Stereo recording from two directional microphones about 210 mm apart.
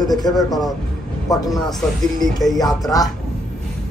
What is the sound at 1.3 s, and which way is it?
Speech, 15° left (ahead or behind).